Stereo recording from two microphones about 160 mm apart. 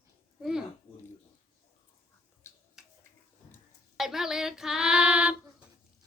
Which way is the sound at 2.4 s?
15° left (ahead or behind).